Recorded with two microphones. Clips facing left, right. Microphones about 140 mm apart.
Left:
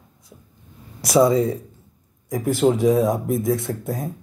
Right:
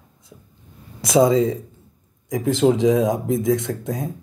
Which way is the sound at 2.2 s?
90° right.